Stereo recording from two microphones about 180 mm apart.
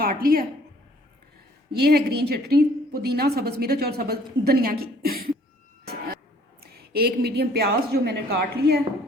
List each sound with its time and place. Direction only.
0.0 s a woman's voice: 55° right (ahead or behind)
1.8 s a woman's voice: 60° right (ahead or behind)
5.8 s a sound: 60° right (ahead or behind)
6.6 s a woman's voice: 60° right (ahead or behind)